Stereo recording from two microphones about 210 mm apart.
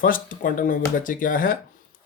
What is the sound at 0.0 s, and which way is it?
Speech, 40° left (ahead or behind).